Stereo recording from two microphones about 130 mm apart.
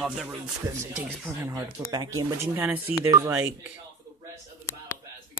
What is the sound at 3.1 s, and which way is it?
Speech, 25° right (ahead or behind).